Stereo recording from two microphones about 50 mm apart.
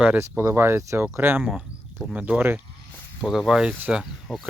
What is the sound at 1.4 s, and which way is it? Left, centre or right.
Speech, centre.